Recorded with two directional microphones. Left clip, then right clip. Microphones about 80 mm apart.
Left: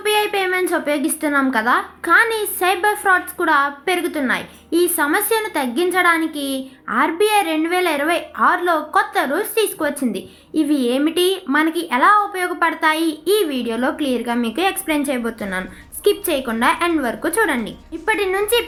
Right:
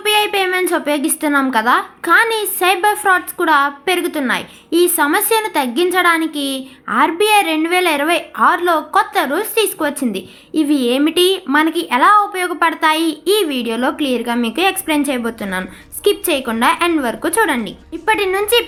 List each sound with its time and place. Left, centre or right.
0.0 s a woman's voice: right